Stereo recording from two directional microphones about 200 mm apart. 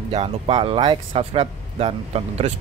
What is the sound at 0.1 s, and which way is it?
A man's voice, 25° right (ahead or behind).